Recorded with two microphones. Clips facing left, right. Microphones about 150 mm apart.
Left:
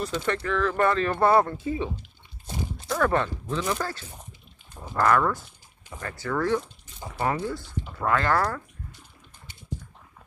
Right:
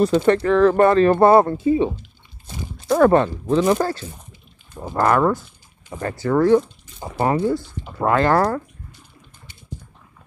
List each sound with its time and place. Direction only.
0.0 s speech: 40° right (ahead or behind); by 1.9 s 25° right (ahead or behind)
2.9 s speech: 35° right (ahead or behind)